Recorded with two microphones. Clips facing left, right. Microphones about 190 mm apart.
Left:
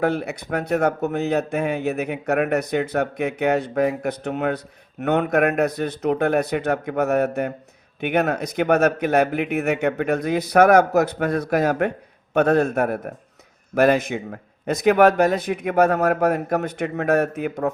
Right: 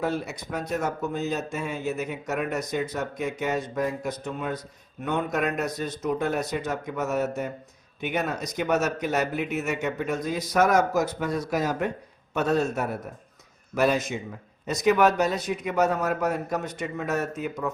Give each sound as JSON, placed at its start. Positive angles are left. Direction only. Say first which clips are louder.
{"t": 0.0, "sound": "speech", "louder": "left 6 dB", "side_deg": 60}